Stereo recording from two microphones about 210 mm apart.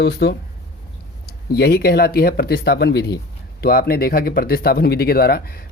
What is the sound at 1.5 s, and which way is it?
Speech, 50° left (ahead or behind).